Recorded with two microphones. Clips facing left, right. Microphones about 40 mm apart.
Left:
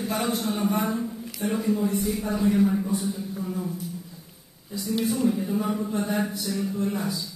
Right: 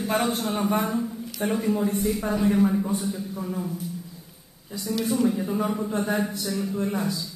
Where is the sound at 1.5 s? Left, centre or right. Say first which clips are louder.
Even; centre.